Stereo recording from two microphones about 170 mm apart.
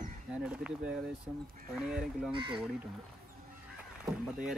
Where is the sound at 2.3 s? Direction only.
30° right (ahead or behind).